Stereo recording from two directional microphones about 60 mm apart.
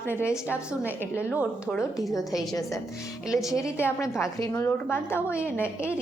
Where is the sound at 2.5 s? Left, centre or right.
Left.